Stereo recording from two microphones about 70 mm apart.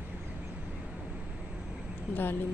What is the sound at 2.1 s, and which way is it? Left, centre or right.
Speech, left.